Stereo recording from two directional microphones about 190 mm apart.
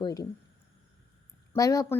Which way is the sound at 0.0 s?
20° left (ahead or behind).